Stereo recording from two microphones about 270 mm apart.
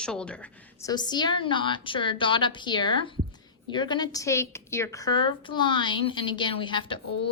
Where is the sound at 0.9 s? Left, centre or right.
Centre.